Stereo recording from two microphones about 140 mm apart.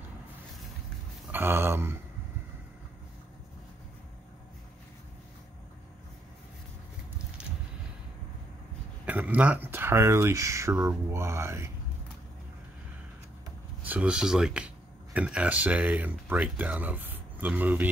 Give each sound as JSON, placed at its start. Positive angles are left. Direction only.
{"t": 1.3, "sound": "speech", "side_deg": -15}
{"t": 9.0, "sound": "speech", "side_deg": -10}
{"t": 13.8, "sound": "speech", "side_deg": -10}